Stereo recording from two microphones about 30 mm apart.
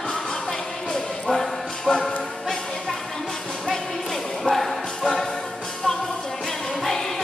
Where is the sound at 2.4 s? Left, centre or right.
Centre.